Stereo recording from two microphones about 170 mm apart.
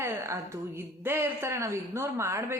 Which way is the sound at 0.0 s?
15° right (ahead or behind).